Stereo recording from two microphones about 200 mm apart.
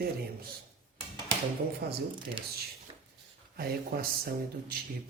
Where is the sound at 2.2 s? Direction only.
25° right (ahead or behind).